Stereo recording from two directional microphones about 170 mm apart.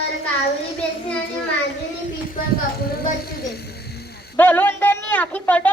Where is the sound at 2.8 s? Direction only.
65° left (ahead or behind).